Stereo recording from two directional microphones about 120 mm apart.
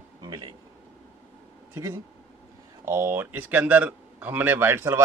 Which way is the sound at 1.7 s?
25° right (ahead or behind).